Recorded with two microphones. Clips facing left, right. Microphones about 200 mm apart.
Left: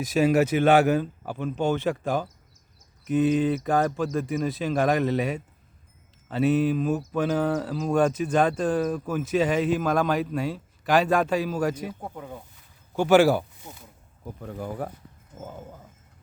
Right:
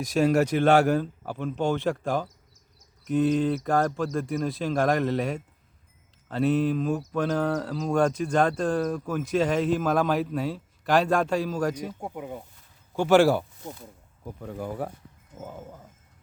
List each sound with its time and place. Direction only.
0.0 s speech: 5° left (ahead or behind)
12.0 s speech: 15° right (ahead or behind)
13.0 s speech: centre (ahead or behind)